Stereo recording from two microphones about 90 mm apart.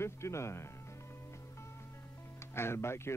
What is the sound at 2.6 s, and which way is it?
Speech, 30° left (ahead or behind).